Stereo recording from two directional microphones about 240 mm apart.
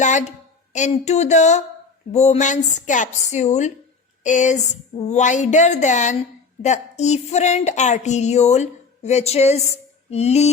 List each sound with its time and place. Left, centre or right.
0.0 s a woman's voice: left